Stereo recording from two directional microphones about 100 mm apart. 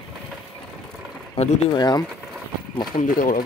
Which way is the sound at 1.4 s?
75° left (ahead or behind).